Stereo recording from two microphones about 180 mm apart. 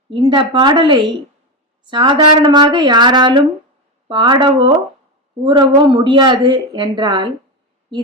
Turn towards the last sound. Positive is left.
turn(degrees=-25)  # may be behind; listen again after turning